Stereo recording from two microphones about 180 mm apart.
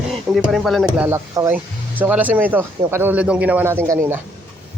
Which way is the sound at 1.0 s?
15° right (ahead or behind).